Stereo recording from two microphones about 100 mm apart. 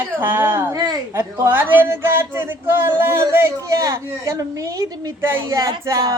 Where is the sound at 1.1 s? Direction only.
20° right (ahead or behind).